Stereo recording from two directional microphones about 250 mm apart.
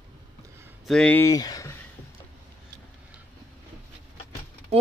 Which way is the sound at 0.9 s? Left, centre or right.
Centre.